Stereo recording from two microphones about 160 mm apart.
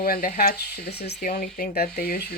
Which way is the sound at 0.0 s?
65° left (ahead or behind).